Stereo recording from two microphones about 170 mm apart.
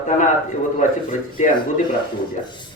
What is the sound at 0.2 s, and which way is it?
Speech, 45° left (ahead or behind).